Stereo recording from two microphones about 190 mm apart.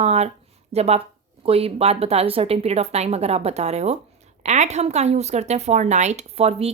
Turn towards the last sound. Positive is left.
turn(degrees=-30)  # may be behind; listen again after turning